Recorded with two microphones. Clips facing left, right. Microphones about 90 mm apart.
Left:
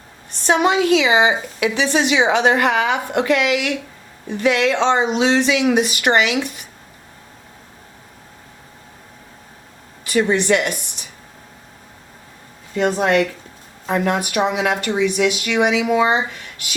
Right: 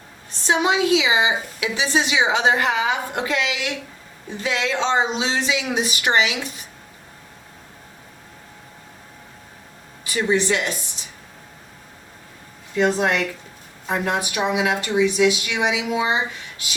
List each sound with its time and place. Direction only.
0.3 s a woman's voice: 60° left (ahead or behind)
10.0 s a woman's voice: 60° left (ahead or behind)
14.1 s a woman's voice: 55° left (ahead or behind)